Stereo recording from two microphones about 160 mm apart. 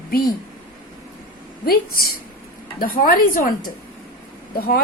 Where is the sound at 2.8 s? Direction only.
60° left (ahead or behind).